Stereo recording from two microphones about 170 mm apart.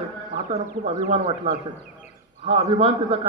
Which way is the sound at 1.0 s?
40° right (ahead or behind).